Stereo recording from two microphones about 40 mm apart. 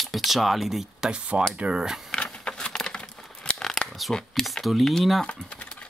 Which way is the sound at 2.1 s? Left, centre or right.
Left.